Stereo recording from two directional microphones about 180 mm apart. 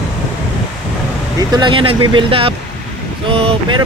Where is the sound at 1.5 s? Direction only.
30° right (ahead or behind).